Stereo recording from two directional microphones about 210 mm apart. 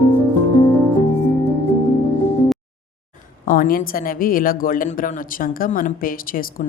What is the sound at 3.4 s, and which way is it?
A woman's voice, 40° left (ahead or behind).